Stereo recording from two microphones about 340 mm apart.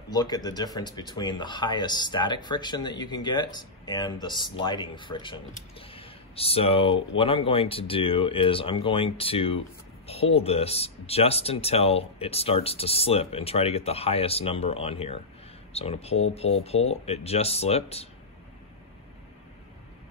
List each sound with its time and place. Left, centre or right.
0.1 s speech: centre